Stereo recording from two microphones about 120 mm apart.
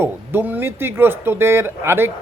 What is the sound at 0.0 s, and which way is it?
Speech, 20° right (ahead or behind).